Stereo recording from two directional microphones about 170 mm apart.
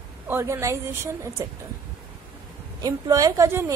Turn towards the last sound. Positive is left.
turn(degrees=-15)  # may be behind; listen again after turning